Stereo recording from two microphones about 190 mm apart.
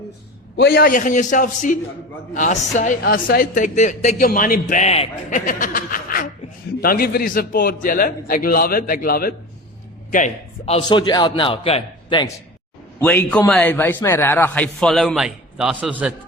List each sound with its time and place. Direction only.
0.5 s a woman's voice: 55° left (ahead or behind); by 12.3 s 25° left (ahead or behind)
13.0 s a man's voice: 10° left (ahead or behind)